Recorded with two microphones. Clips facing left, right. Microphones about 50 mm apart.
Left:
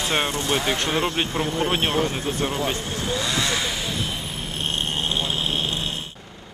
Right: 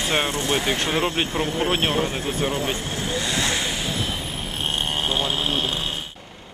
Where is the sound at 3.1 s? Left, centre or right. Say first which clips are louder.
Even; right.